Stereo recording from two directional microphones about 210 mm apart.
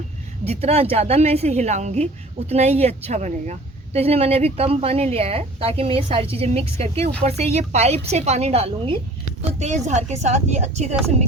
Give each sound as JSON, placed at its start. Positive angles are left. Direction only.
{"t": 0.4, "sound": "a woman's voice", "side_deg": -30}